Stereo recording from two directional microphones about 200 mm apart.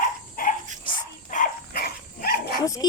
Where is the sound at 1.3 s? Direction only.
45° left (ahead or behind).